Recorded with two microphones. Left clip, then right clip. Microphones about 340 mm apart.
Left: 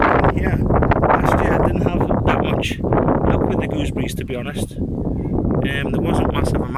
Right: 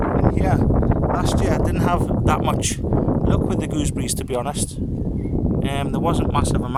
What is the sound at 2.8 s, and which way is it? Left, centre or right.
Speech, left.